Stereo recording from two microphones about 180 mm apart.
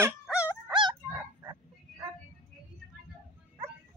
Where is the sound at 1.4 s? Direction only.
10° right (ahead or behind).